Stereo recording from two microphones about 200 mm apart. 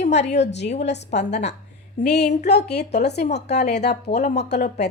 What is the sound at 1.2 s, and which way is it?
Speech, 35° left (ahead or behind).